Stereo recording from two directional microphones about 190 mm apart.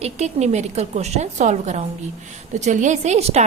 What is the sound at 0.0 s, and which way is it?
A woman's voice, 35° right (ahead or behind).